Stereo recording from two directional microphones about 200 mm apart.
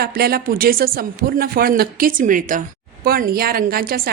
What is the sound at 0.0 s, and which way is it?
A woman's voice, 50° right (ahead or behind).